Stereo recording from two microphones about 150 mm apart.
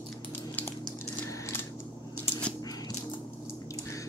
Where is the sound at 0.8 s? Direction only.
20° left (ahead or behind).